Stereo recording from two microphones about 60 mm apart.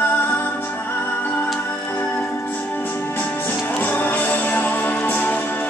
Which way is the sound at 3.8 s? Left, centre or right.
Left.